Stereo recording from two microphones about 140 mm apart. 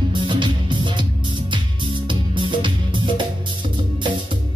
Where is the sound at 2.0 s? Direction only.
35° right (ahead or behind).